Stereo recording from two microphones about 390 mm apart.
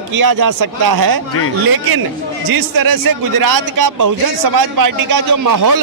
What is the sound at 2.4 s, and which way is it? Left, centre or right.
A man's voice, right.